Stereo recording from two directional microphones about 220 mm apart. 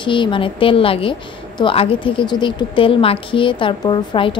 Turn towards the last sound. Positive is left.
turn(degrees=20)  # may be behind; listen again after turning